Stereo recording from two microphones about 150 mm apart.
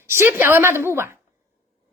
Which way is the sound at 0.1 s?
15° right (ahead or behind).